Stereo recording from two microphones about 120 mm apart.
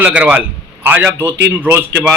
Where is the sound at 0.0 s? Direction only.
10° right (ahead or behind).